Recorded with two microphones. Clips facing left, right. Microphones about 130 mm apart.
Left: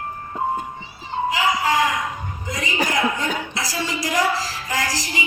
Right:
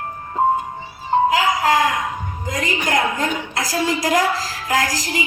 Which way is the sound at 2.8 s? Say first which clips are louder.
Right 4 dB; 45° right (ahead or behind).